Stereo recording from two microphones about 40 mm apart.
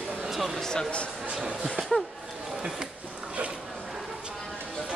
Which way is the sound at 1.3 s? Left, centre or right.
Centre.